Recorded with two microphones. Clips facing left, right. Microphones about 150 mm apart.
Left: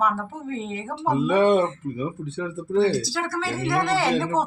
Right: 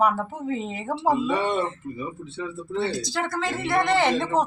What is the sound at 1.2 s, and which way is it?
Speech, 60° left (ahead or behind).